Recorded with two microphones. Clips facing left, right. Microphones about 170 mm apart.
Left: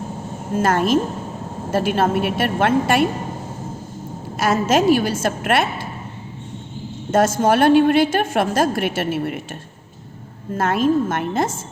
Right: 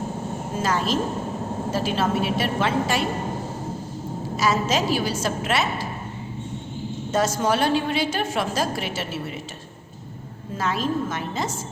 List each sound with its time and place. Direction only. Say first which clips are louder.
0.6 s a woman's voice: left 6 dB; 55° left (ahead or behind)
4.4 s a woman's voice: left 5 dB; 55° left (ahead or behind)
7.1 s a woman's voice: left 6 dB; 50° left (ahead or behind)
10.6 s a woman's voice: left 7 dB; 55° left (ahead or behind)